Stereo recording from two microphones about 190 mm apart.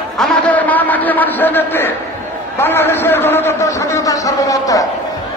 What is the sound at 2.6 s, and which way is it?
A man's voice, 10° left (ahead or behind).